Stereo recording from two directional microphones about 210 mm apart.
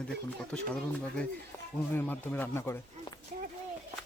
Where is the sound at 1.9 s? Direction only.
10° left (ahead or behind).